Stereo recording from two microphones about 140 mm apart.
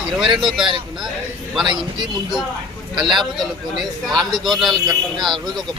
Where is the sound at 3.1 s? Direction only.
Centre (ahead or behind).